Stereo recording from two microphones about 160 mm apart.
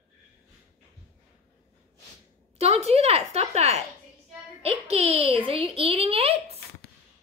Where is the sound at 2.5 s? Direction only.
40° right (ahead or behind).